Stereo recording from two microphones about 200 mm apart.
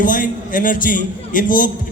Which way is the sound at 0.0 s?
45° left (ahead or behind).